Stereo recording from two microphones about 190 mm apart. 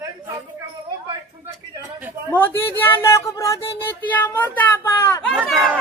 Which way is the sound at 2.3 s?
10° left (ahead or behind).